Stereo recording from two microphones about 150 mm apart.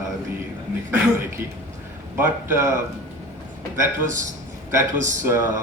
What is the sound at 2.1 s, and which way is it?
Speech, 15° right (ahead or behind).